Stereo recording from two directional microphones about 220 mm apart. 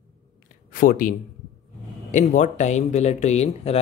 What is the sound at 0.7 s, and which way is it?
Speech, 40° left (ahead or behind).